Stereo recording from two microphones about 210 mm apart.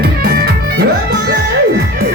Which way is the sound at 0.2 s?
45° right (ahead or behind).